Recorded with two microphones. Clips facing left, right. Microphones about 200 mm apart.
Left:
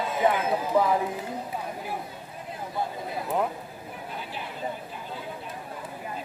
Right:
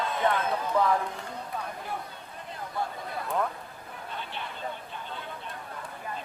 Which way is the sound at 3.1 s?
20° left (ahead or behind).